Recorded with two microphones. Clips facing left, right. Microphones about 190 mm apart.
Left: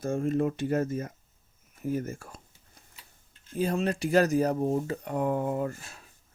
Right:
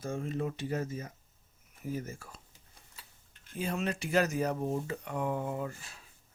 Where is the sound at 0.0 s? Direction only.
45° left (ahead or behind).